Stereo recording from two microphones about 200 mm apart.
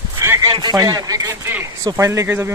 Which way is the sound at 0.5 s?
20° right (ahead or behind).